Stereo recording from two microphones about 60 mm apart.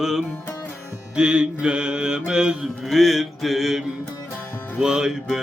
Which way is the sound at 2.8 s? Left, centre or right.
Centre.